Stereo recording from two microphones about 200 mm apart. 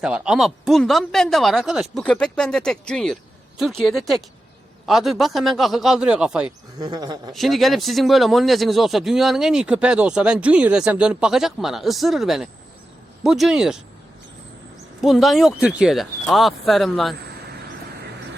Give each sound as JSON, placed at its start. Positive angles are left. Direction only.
{"t": 0.0, "sound": "speech", "side_deg": -5}
{"t": 6.7, "sound": "speech", "side_deg": -20}
{"t": 7.3, "sound": "speech", "side_deg": 0}
{"t": 15.0, "sound": "speech", "side_deg": 0}